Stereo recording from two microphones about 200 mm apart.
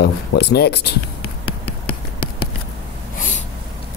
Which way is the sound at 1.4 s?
5° left (ahead or behind).